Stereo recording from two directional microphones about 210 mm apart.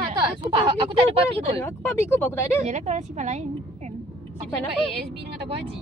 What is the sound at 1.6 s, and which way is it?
Speech, 10° left (ahead or behind).